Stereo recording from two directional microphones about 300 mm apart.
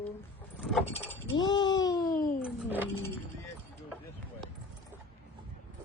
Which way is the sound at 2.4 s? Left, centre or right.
Centre.